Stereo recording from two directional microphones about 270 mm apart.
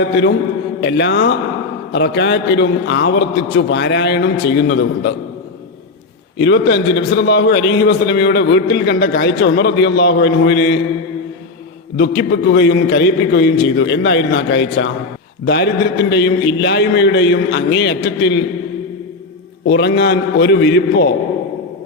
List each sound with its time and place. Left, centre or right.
0.1 s a man's voice: left
6.4 s a man's voice: left
11.9 s a man's voice: left
19.6 s a man's voice: left